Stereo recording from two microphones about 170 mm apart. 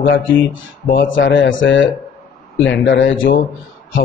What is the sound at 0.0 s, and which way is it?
A man's voice, 70° left (ahead or behind).